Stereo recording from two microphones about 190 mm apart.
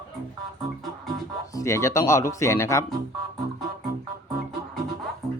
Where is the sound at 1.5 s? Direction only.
15° left (ahead or behind).